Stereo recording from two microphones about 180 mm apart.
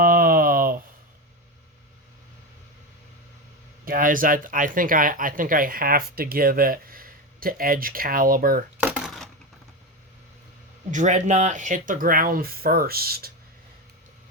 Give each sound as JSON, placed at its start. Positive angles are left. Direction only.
{"t": 0.0, "sound": "a sound", "side_deg": -55}
{"t": 3.8, "sound": "speech", "side_deg": -50}
{"t": 8.8, "sound": "coin", "side_deg": -5}
{"t": 10.9, "sound": "speech", "side_deg": -40}